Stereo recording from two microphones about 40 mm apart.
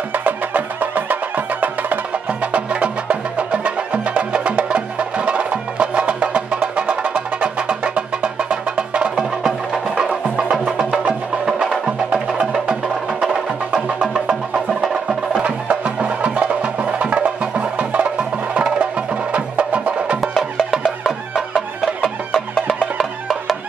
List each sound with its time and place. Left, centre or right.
0.1 s music: right
2.4 s music: right
11.4 s music: centre
15.4 s music: right
22.0 s music: centre